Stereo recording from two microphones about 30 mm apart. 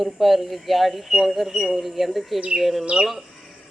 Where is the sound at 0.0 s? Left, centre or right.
Centre.